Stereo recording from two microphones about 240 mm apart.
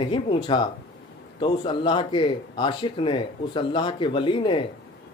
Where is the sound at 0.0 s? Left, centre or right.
Left.